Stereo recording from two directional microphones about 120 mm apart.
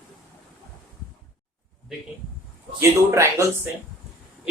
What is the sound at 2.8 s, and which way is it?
Speech, 20° right (ahead or behind).